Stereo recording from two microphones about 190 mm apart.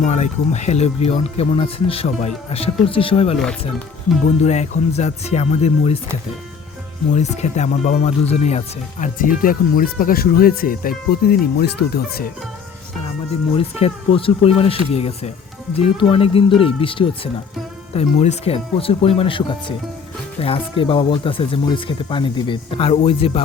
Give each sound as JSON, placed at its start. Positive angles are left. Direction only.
{"t": 0.0, "sound": "speech", "side_deg": 35}
{"t": 4.4, "sound": "speech", "side_deg": 35}
{"t": 7.1, "sound": "speech", "side_deg": 35}
{"t": 13.6, "sound": "speech", "side_deg": 30}